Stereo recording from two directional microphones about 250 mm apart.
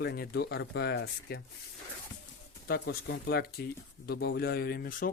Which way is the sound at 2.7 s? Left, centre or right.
Left.